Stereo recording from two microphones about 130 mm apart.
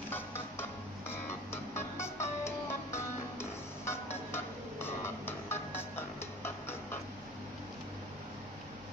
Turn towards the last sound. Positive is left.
turn(degrees=20)  # may be behind; listen again after turning